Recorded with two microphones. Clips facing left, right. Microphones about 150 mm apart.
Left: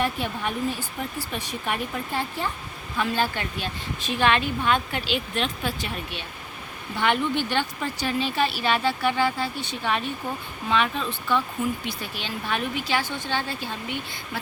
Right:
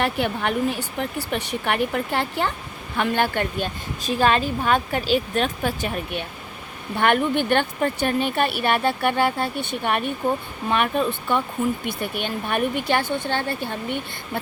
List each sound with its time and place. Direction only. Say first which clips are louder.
0.0 s speech: right 4 dB; 70° right (ahead or behind)
3.0 s speech: right 4 dB; 55° right (ahead or behind)
4.0 s a woman's voice: right 3 dB; 40° right (ahead or behind); by 14.4 s 55° right (ahead or behind)